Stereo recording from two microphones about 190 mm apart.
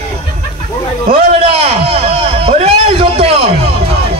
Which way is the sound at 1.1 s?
30° right (ahead or behind).